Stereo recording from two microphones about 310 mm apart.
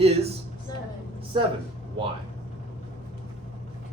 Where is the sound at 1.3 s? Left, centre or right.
Centre.